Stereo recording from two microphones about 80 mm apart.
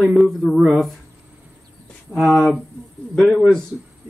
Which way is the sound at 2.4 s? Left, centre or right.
Centre.